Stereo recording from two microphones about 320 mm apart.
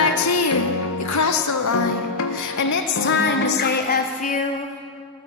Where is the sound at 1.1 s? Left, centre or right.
Left.